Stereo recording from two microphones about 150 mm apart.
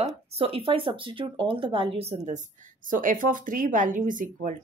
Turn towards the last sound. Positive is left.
turn(degrees=-60)  # may be behind; listen again after turning